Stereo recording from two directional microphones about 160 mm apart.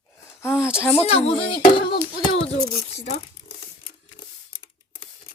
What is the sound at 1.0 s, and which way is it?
Speech, 40° left (ahead or behind).